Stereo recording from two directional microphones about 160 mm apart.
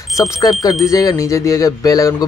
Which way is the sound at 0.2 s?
25° left (ahead or behind).